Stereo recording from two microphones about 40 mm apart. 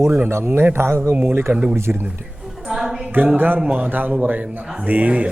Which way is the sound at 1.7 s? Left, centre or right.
Right.